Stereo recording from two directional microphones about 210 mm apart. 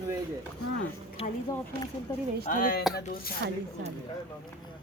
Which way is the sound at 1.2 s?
30° left (ahead or behind).